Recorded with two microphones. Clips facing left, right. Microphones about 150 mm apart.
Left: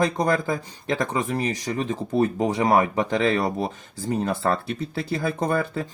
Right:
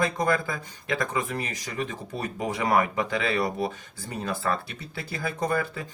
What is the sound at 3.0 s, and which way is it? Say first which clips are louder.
Speech: left 5 dB; 45° left (ahead or behind).